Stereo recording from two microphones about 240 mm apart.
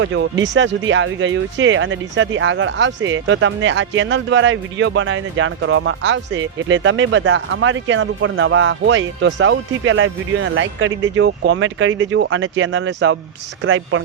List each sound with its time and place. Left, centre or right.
0.0 s speech: right